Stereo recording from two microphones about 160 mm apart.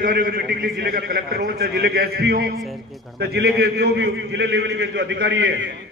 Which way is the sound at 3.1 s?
90° right.